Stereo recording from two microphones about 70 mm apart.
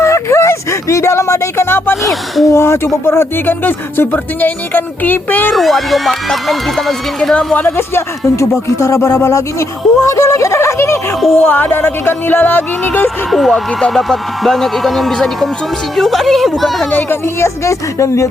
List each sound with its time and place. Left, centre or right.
0.0 s a sound: left
2.0 s speech: centre
2.5 s speech: left
5.5 s speech: centre
7.3 s speech: left
7.8 s speech: left
11.3 s speech: left
13.3 s speech: centre
16.9 s speech: left